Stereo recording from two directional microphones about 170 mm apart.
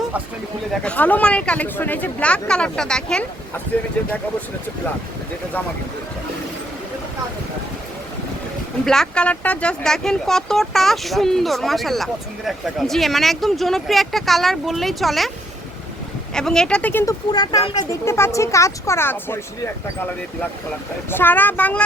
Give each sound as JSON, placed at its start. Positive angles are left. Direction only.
{"t": 0.7, "sound": "speech", "side_deg": 10}
{"t": 8.8, "sound": "speech", "side_deg": 5}
{"t": 16.3, "sound": "speech", "side_deg": 5}
{"t": 17.3, "sound": "speech", "side_deg": 25}
{"t": 21.1, "sound": "speech", "side_deg": 10}